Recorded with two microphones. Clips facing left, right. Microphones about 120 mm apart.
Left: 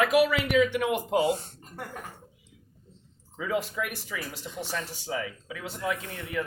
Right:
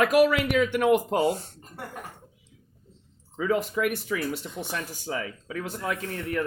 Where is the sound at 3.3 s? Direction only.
50° right (ahead or behind).